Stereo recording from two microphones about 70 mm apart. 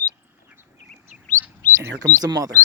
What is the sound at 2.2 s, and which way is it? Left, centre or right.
Speech, right.